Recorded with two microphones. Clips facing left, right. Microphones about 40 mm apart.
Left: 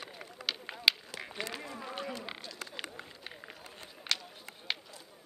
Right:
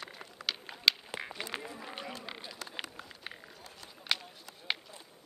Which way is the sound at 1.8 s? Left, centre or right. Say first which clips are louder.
Left 3 dB; centre.